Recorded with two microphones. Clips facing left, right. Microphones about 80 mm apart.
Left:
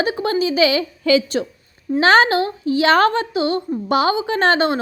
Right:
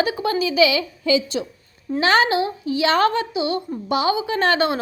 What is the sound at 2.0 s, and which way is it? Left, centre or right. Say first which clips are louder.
A woman's voice: left 4 dB; left.